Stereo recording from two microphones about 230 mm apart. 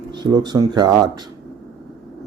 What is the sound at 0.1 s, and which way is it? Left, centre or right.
Speech, centre.